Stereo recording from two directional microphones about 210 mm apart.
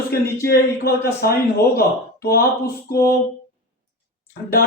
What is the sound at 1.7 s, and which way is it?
Speech, 45° left (ahead or behind).